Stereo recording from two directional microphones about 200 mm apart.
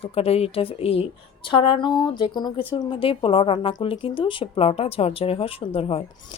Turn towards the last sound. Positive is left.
turn(degrees=30)  # may be behind; listen again after turning